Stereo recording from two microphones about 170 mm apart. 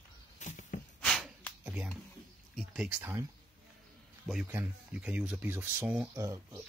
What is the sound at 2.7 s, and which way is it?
Speech, 5° right (ahead or behind).